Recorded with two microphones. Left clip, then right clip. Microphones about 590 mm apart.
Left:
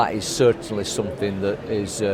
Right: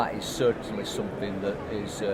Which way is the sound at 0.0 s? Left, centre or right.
Left.